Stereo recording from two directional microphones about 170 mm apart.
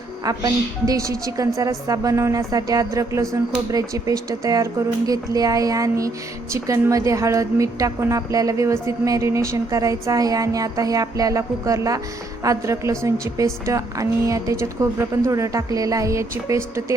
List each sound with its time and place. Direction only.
0.3 s a woman's voice: 20° right (ahead or behind)